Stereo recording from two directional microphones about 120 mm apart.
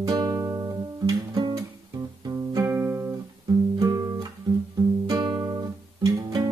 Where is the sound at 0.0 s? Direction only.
35° right (ahead or behind).